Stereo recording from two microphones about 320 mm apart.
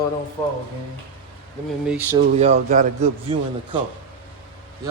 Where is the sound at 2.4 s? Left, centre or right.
Right.